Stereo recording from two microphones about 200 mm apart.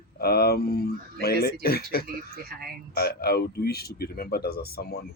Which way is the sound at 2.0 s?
50° right (ahead or behind).